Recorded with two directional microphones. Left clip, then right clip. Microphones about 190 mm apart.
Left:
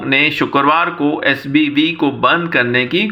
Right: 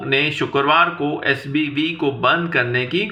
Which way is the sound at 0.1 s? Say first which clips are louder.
Left 5 dB; 30° left (ahead or behind).